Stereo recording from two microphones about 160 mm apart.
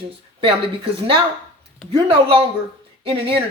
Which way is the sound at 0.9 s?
30° right (ahead or behind).